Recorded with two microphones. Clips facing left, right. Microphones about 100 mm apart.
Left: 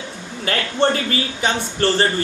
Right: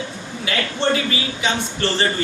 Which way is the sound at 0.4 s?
45° left (ahead or behind).